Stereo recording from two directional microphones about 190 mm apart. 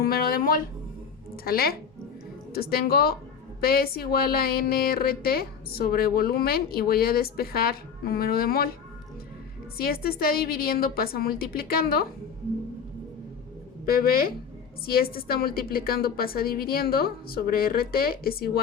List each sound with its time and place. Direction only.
0.0 s music: 50° left (ahead or behind)
1.5 s a woman's voice: 50° left (ahead or behind)
9.7 s a woman's voice: 50° left (ahead or behind)
13.8 s a woman's voice: 50° left (ahead or behind)